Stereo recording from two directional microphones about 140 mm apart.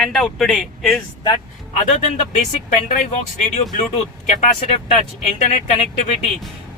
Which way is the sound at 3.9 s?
60° left (ahead or behind).